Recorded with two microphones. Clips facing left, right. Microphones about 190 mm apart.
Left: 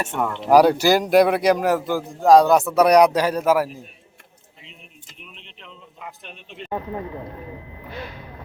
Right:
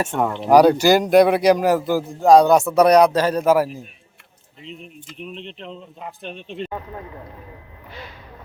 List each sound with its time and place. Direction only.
0.2 s speech: 15° right (ahead or behind)
0.4 s a man's voice: 5° left (ahead or behind)
5.2 s a man's voice: 35° right (ahead or behind)
6.7 s a man's voice: 15° left (ahead or behind)